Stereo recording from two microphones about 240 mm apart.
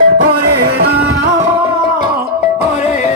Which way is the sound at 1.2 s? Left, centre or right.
Centre.